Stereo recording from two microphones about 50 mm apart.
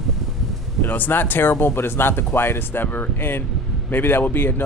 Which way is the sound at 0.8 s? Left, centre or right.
Left.